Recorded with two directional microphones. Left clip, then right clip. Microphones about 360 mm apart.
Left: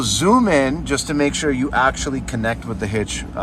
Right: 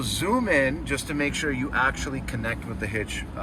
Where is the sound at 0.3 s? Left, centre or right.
Centre.